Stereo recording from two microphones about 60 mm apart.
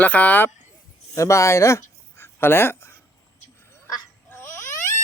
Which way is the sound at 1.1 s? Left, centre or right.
Left.